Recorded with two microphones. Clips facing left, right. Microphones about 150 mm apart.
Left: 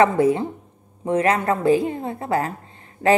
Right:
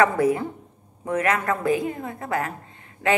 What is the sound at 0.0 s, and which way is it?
A woman's voice, 25° left (ahead or behind).